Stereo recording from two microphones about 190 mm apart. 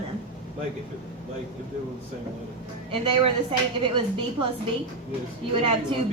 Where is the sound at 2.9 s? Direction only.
30° right (ahead or behind).